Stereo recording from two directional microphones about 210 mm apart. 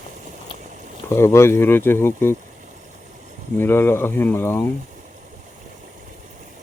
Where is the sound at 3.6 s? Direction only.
10° left (ahead or behind).